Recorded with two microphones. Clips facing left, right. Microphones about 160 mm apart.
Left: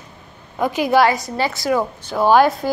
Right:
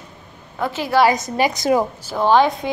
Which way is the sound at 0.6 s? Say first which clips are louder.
Left 4 dB; 15° left (ahead or behind).